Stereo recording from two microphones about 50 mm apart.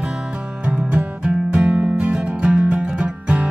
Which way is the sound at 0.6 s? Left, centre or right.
Right.